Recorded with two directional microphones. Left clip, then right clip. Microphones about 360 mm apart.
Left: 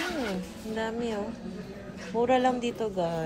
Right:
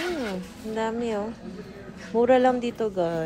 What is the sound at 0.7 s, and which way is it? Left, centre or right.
Speech, right.